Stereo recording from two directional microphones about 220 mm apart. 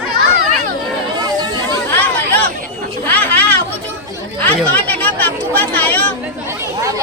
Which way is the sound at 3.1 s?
5° left (ahead or behind).